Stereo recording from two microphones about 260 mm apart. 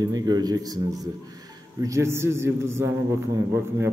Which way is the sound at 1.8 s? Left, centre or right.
Centre.